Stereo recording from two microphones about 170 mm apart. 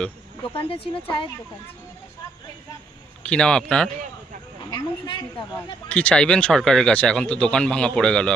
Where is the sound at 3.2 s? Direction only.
5° left (ahead or behind).